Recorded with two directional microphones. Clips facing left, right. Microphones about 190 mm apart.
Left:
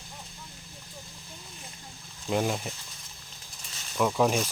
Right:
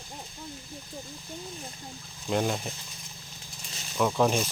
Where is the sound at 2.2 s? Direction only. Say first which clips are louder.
Even; 5° left (ahead or behind).